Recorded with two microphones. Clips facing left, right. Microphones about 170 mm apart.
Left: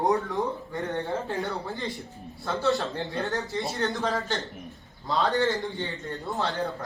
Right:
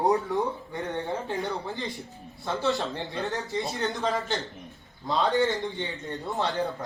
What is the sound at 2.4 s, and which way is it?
Speech, centre (ahead or behind).